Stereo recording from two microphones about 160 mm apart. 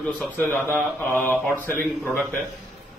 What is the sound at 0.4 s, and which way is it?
Mantra, 10° left (ahead or behind).